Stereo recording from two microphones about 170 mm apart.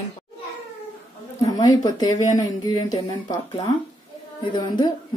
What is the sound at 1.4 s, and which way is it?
Speech, 20° left (ahead or behind).